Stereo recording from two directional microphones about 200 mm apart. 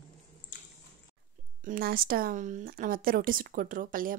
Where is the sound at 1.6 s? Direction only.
45° right (ahead or behind).